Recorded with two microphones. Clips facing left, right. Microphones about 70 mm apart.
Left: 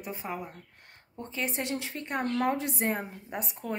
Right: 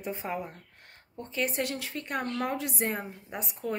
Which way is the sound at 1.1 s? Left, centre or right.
Left.